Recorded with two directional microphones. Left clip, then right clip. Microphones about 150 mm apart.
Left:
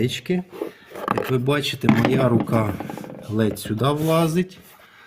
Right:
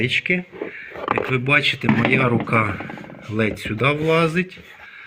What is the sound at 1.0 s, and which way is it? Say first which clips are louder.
Speech: right 1 dB; 30° left (ahead or behind).